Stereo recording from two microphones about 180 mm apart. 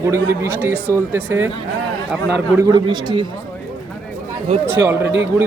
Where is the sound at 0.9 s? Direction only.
15° right (ahead or behind).